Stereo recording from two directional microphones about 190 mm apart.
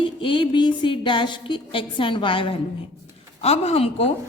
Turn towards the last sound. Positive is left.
turn(degrees=30)  # may be behind; listen again after turning